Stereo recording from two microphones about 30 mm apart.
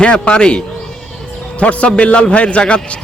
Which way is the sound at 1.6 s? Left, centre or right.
Left.